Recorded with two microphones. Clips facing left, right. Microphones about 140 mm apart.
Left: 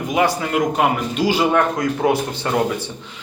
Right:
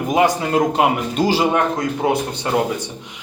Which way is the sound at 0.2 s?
20° right (ahead or behind).